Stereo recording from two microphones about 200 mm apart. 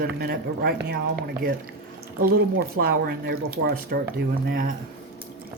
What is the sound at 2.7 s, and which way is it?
Speech, 50° right (ahead or behind).